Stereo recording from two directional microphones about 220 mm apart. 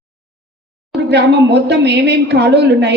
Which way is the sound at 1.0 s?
50° right (ahead or behind).